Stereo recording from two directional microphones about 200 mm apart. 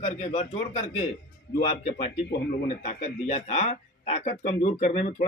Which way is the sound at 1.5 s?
35° left (ahead or behind).